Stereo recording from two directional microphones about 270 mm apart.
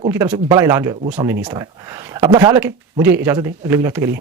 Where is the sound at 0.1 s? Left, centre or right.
Centre.